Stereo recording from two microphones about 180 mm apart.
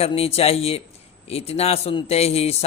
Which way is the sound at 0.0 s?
35° left (ahead or behind).